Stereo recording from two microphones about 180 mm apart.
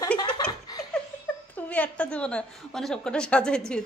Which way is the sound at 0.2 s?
20° left (ahead or behind).